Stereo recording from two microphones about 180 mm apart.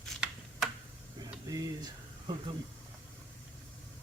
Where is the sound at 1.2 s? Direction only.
20° right (ahead or behind).